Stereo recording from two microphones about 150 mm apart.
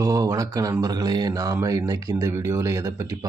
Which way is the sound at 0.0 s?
20° right (ahead or behind).